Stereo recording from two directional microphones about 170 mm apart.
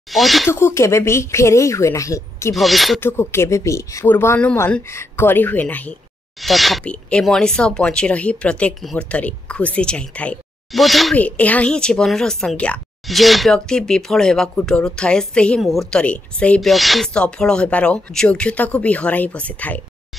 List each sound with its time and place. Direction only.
0.1 s speech: centre (ahead or behind)
0.5 s speech: 15° left (ahead or behind)
2.5 s speech: centre (ahead or behind)
3.0 s speech: 15° left (ahead or behind)